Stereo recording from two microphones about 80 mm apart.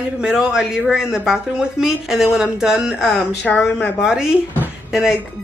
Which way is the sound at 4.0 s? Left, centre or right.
Centre.